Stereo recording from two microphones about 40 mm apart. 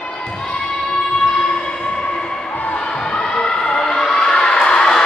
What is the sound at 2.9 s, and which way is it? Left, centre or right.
Music, left.